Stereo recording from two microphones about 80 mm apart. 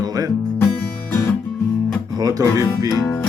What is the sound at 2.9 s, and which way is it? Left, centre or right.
Music, left.